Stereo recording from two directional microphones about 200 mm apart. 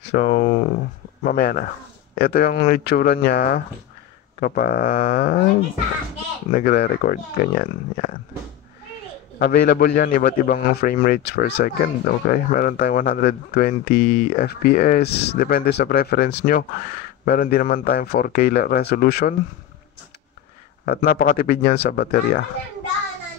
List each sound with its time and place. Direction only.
0.1 s speech: 40° left (ahead or behind)
6.5 s speech: 50° left (ahead or behind)
9.4 s speech: 55° left (ahead or behind)
20.8 s speech: 50° left (ahead or behind)